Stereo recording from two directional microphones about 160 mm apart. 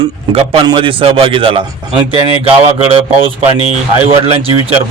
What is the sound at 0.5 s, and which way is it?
Speech, 30° right (ahead or behind).